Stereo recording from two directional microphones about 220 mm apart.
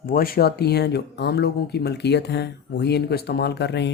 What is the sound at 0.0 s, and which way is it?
Speech, 40° left (ahead or behind).